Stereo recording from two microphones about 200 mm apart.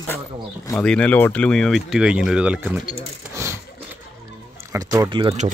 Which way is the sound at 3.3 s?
15° right (ahead or behind).